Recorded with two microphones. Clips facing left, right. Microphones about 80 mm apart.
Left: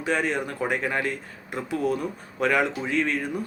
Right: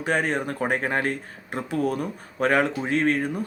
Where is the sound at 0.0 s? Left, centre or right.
Right.